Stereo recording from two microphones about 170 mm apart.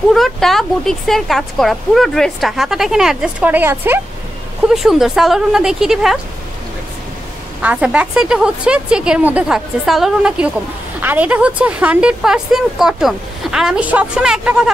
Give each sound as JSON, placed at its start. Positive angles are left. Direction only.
{"t": 0.1, "sound": "speech", "side_deg": 0}
{"t": 4.6, "sound": "speech", "side_deg": 0}
{"t": 7.6, "sound": "speech", "side_deg": -5}